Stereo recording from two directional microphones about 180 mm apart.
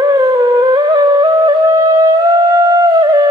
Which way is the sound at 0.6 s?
20° right (ahead or behind).